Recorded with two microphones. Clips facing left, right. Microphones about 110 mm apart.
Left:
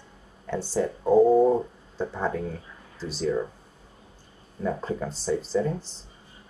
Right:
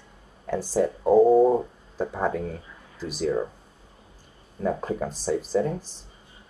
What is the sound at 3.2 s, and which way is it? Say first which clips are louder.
Speech: right 1 dB; 15° right (ahead or behind).